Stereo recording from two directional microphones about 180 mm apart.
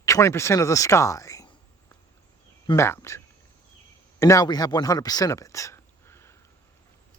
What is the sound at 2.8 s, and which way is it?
Speech, 15° left (ahead or behind).